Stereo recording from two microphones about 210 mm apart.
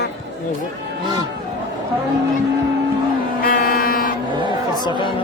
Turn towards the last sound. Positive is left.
turn(degrees=40)  # may be behind; listen again after turning